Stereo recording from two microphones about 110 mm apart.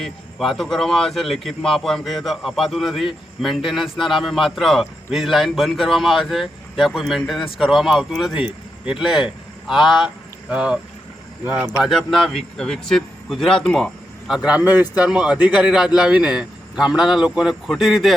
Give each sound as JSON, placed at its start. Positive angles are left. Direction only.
{"t": 0.0, "sound": "a man's voice", "side_deg": 0}
{"t": 11.8, "sound": "a man's voice", "side_deg": 0}